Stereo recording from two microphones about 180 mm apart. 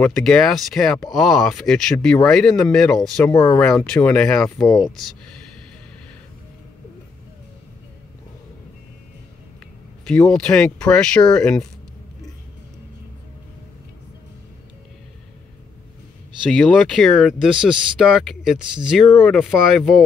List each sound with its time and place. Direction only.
0.0 s speech: 5° left (ahead or behind)
3.3 s speech: 15° left (ahead or behind)
3.6 s speech: 5° left (ahead or behind)
10.0 s speech: 5° left (ahead or behind)
16.4 s speech: 5° left (ahead or behind)